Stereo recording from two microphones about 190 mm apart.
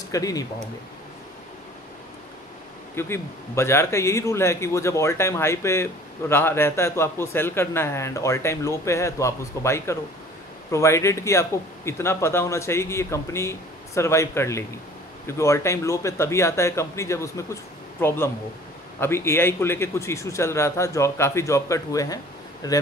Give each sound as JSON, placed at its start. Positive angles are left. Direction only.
{"t": 0.1, "sound": "speech", "side_deg": 20}
{"t": 3.0, "sound": "speech", "side_deg": 15}